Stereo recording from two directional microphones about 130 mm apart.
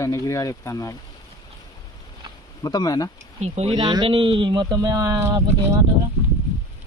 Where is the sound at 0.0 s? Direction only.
25° left (ahead or behind).